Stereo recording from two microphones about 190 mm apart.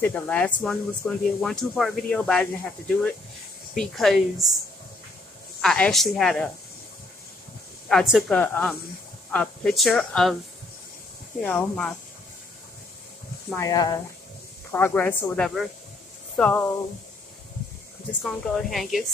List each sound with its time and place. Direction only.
0.0 s speech: 5° left (ahead or behind)
5.6 s speech: 5° left (ahead or behind)
7.9 s speech: centre (ahead or behind)
11.4 s speech: 5° left (ahead or behind)
13.6 s speech: 20° left (ahead or behind)
18.2 s speech: centre (ahead or behind)